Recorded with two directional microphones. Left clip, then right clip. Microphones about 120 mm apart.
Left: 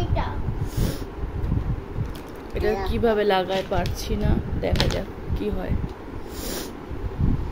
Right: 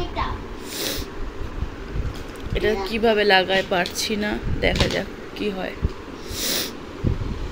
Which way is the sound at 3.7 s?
Centre (ahead or behind).